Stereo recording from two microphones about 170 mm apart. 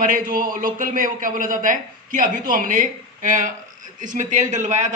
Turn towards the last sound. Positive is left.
turn(degrees=-45)  # may be behind; listen again after turning